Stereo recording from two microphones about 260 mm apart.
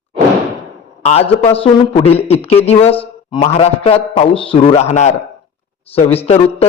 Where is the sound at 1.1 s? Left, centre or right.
Left.